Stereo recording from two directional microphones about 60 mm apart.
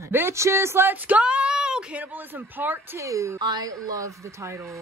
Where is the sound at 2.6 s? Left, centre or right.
Right.